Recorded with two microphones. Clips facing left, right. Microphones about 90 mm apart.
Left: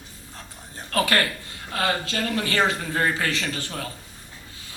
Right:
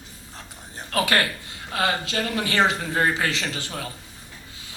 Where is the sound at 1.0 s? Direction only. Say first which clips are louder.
Even; 20° right (ahead or behind).